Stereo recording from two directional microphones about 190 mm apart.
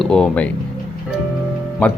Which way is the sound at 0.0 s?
5° left (ahead or behind).